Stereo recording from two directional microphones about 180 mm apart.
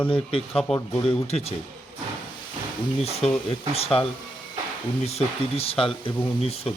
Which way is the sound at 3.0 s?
35° left (ahead or behind).